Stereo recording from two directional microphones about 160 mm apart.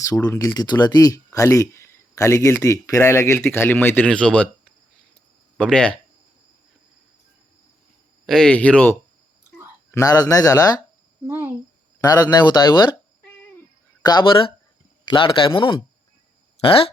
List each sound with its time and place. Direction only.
0.3 s speech: 20° left (ahead or behind)
5.5 s speech: 5° left (ahead or behind)
8.3 s speech: 5° left (ahead or behind)
9.5 s speech: 20° left (ahead or behind)
11.3 s speech: 10° right (ahead or behind)
11.9 s speech: 25° left (ahead or behind)
14.0 s speech: 25° left (ahead or behind)